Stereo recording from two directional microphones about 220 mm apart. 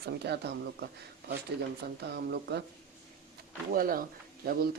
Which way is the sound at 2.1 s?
50° right (ahead or behind).